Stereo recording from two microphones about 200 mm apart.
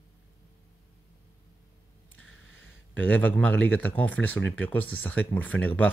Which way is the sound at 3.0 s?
10° left (ahead or behind).